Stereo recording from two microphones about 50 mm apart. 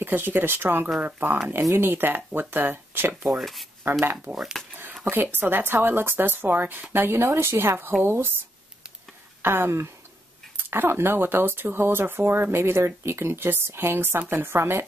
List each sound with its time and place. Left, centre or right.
0.0 s speech: right
3.9 s speech: right
4.6 s a sound: centre
5.1 s speech: right
9.4 s speech: right